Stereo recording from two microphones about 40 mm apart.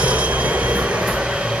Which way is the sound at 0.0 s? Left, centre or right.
Right.